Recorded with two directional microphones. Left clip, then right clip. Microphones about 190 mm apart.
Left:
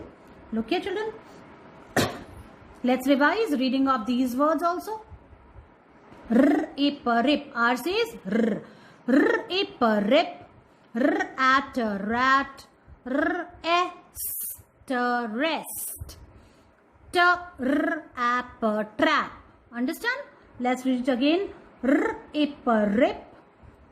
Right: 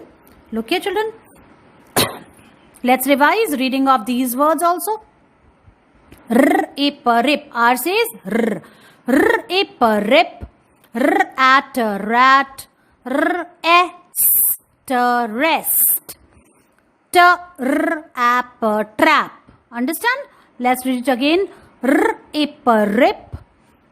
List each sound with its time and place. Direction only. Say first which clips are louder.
0.5 s a woman's voice: right 9 dB; 50° right (ahead or behind)
2.8 s a woman's voice: right 8 dB; 40° right (ahead or behind)
6.2 s a woman's voice: right 8 dB; 40° right (ahead or behind)
14.8 s a woman's voice: right 10 dB; 35° right (ahead or behind)
17.1 s a woman's voice: right 10 dB; 35° right (ahead or behind)